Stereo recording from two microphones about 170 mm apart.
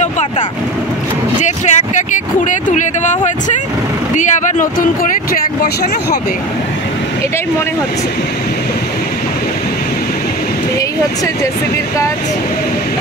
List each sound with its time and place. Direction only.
1.4 s a sound: 45° left (ahead or behind)
2.4 s speech: 45° left (ahead or behind)
4.2 s speech: 45° left (ahead or behind)